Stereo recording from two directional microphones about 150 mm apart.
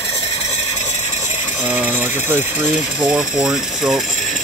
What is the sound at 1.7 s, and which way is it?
Speech, 10° right (ahead or behind).